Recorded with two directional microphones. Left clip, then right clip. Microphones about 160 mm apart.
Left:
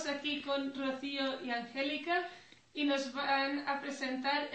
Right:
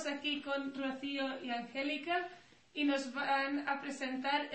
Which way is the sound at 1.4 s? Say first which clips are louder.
Left 2 dB; 20° right (ahead or behind).